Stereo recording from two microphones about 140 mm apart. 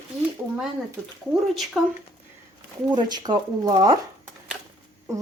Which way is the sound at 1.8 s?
5° right (ahead or behind).